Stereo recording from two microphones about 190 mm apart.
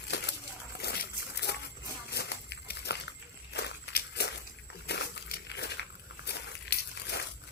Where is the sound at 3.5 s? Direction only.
60° left (ahead or behind).